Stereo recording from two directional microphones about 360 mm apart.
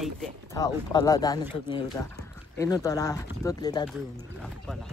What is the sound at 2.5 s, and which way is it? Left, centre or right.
Speech, centre.